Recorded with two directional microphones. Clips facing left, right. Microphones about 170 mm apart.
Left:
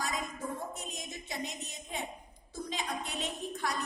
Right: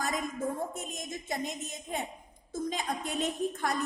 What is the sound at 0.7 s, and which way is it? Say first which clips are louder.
A woman's voice: right 4 dB; 50° right (ahead or behind).